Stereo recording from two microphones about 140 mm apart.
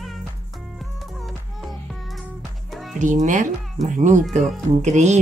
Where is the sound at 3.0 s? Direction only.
60° right (ahead or behind).